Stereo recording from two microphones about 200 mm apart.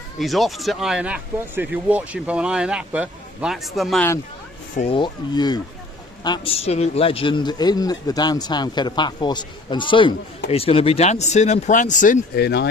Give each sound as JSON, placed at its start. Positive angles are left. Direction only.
{"t": 0.2, "sound": "speech", "side_deg": 0}
{"t": 4.8, "sound": "a man's voice", "side_deg": 25}
{"t": 12.4, "sound": "speech", "side_deg": 55}